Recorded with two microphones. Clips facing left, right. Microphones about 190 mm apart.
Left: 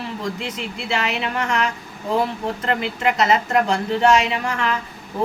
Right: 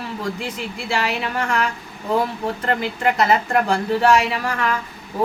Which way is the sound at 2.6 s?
25° left (ahead or behind).